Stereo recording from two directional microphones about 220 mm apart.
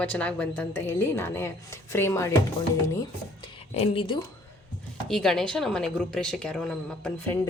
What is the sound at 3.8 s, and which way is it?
Speech, 25° left (ahead or behind).